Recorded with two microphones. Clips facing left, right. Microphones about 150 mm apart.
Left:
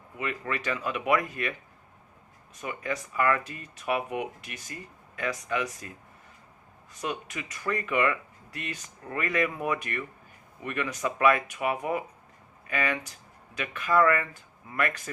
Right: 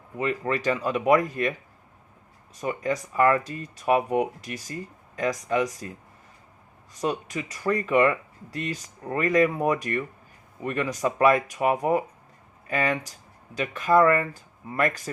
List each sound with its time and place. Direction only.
0.2 s speech: 35° right (ahead or behind)
2.6 s speech: 35° right (ahead or behind)
7.0 s speech: 35° right (ahead or behind)